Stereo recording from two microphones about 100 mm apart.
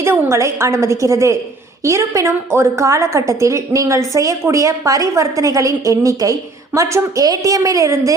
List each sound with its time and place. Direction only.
0.0 s a woman's voice: 25° right (ahead or behind)